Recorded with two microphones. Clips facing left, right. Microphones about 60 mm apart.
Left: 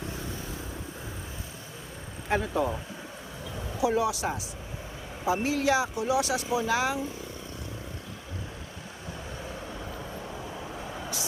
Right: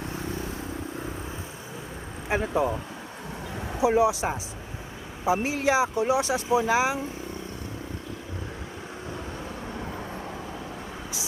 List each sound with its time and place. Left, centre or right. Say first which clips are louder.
2.3 s speech: right 2 dB; right
3.8 s speech: right 5 dB; right